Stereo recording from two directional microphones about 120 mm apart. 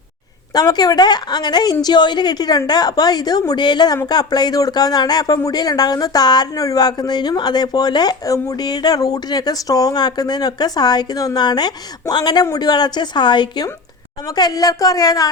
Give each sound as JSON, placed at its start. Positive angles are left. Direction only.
{"t": 0.5, "sound": "speech", "side_deg": 35}